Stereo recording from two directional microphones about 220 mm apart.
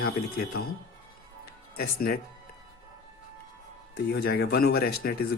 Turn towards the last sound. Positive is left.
turn(degrees=45)  # may be behind; listen again after turning